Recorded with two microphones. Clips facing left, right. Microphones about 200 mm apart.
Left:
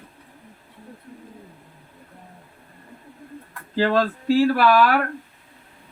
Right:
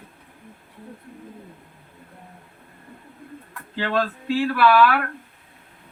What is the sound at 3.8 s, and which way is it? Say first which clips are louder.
Speech: left 4 dB; 40° left (ahead or behind).